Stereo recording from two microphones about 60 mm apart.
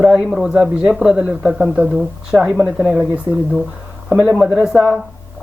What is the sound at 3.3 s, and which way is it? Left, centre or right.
Speech, right.